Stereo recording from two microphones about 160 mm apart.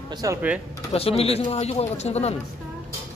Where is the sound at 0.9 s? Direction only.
40° left (ahead or behind).